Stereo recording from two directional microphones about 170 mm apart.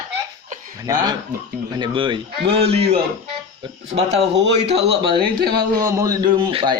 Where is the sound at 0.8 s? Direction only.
20° right (ahead or behind).